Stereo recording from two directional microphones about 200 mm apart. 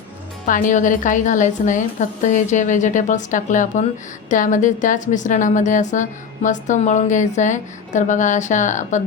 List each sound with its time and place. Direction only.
0.4 s a woman's voice: 40° left (ahead or behind)